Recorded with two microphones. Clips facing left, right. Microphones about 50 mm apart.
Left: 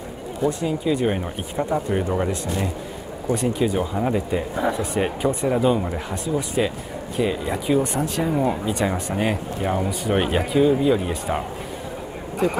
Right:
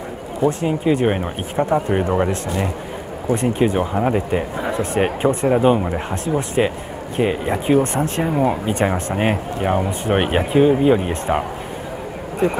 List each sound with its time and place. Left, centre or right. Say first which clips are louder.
0.5 s speech: right 4 dB; right
8.2 s speech: right 3 dB; right